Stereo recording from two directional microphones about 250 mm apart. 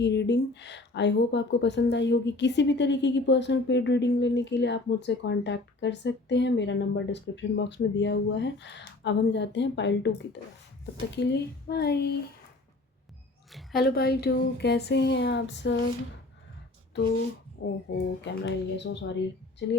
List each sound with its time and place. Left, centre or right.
0.0 s speech: left
13.7 s speech: left
17.6 s speech: left